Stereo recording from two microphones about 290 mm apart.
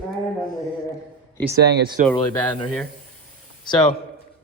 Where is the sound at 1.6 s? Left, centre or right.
Right.